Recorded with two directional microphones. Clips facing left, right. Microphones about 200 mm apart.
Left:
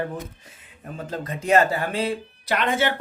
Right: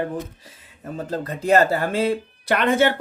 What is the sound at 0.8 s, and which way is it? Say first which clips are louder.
Speech: right 4 dB; 40° right (ahead or behind).